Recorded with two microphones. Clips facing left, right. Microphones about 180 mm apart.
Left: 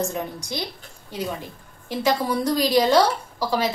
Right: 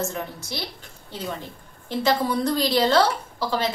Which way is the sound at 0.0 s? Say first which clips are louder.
Left 2 dB; 15° left (ahead or behind).